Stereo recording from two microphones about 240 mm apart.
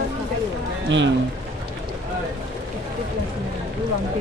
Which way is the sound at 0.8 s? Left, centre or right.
Right.